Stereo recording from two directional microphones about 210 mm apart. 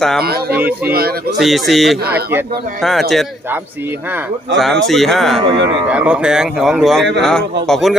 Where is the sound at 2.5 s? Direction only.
45° right (ahead or behind).